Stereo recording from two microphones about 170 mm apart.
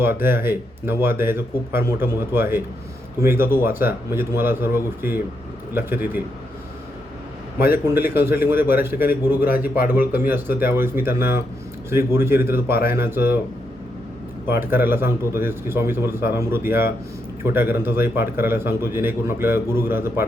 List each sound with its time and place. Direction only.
0.0 s a man's voice: 15° right (ahead or behind)
7.7 s a man's voice: 10° right (ahead or behind)
14.5 s a man's voice: 10° right (ahead or behind)